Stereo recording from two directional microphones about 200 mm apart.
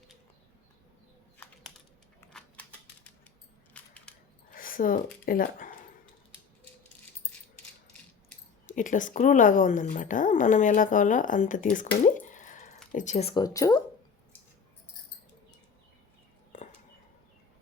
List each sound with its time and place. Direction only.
2.3 s typewriter: 5° left (ahead or behind)
3.8 s crushing: 5° left (ahead or behind)
4.5 s a sound: 45° left (ahead or behind)
5.2 s speech: 45° left (ahead or behind)
8.6 s a woman's voice: 40° left (ahead or behind)
12.0 s drip: 40° left (ahead or behind)
12.9 s speech: 40° left (ahead or behind); by 13.8 s 15° left (ahead or behind)